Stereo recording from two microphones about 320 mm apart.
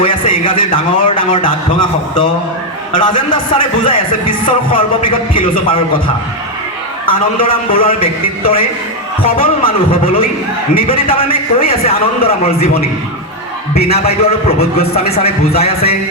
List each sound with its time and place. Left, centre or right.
0.0 s a man's voice: centre
7.0 s a man's voice: left
13.7 s a man's voice: centre